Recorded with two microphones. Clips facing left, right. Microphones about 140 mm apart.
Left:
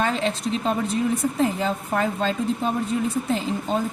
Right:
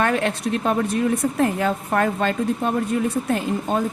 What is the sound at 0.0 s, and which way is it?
A woman's voice, 60° right (ahead or behind).